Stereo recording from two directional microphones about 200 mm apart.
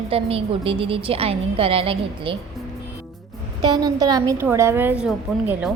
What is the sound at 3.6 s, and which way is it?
A woman's voice, 20° right (ahead or behind).